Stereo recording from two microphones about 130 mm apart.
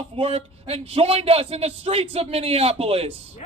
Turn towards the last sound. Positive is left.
turn(degrees=-45)  # may be behind; listen again after turning